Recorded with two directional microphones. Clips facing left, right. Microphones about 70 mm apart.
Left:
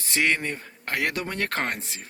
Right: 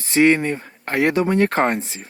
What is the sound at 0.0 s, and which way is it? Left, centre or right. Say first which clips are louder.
Speech: right 9 dB; right.